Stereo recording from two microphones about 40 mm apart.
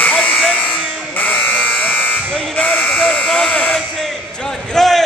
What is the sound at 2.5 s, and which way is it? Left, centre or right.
Sheep, left.